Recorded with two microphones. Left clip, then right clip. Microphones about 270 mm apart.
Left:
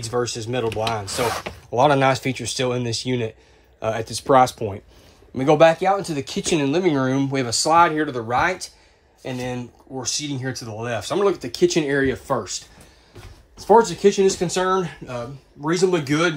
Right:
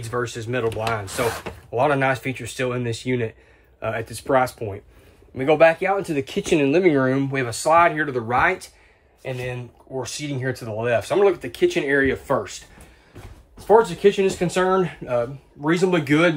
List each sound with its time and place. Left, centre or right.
0.0 s speech: centre
9.9 s speech: centre
13.7 s speech: centre